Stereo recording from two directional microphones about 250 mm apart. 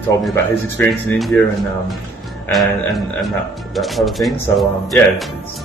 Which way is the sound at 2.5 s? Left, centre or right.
Centre.